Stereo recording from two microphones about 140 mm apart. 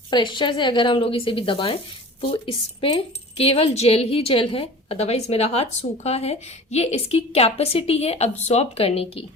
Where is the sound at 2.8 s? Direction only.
45° left (ahead or behind).